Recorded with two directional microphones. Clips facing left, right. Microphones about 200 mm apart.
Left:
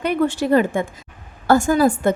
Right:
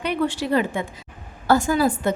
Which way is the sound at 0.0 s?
45° left (ahead or behind).